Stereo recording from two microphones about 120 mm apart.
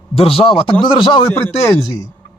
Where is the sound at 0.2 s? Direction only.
55° left (ahead or behind).